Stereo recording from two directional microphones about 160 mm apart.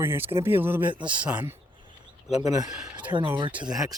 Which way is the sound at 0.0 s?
15° right (ahead or behind).